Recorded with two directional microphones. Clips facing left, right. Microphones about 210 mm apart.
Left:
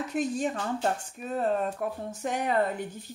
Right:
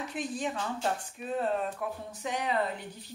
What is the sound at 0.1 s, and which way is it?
A woman's voice, 45° left (ahead or behind).